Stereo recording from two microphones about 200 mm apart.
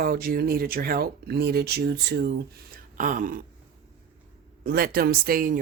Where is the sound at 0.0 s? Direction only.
50° right (ahead or behind).